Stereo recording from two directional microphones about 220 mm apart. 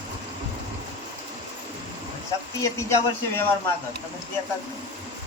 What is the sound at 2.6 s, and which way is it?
Speech, 15° left (ahead or behind).